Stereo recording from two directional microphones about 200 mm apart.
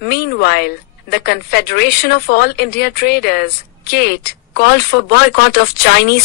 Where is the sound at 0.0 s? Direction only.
55° left (ahead or behind).